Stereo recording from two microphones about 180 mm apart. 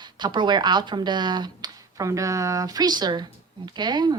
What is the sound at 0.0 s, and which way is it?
Speech, 25° right (ahead or behind).